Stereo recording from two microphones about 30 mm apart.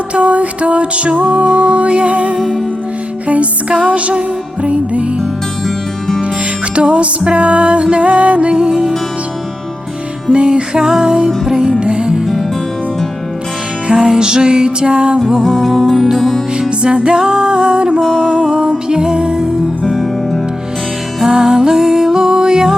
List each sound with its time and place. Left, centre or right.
0.1 s music: right
5.6 s music: centre
6.7 s music: right
10.3 s music: right
13.8 s music: right
14.1 s music: right
15.4 s music: centre
16.8 s music: right
18.0 s music: centre
18.3 s music: centre
19.9 s music: centre
21.4 s music: right